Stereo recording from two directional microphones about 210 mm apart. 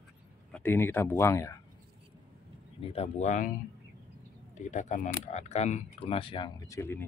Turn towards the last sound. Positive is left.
turn(degrees=10)  # may be behind; listen again after turning